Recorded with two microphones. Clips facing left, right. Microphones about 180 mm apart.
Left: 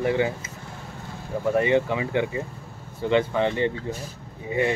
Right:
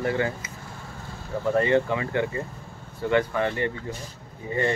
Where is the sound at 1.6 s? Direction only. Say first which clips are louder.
Even; 15° left (ahead or behind).